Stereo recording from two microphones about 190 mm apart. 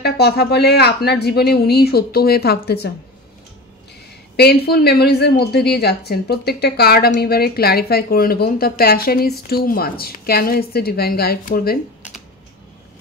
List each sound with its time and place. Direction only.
0.0 s a woman's voice: 60° left (ahead or behind)
4.4 s a woman's voice: 55° left (ahead or behind)